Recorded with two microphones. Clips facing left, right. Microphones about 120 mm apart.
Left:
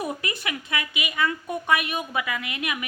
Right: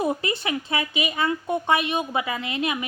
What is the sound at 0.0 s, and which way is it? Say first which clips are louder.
A woman's voice: right 5 dB; 25° right (ahead or behind).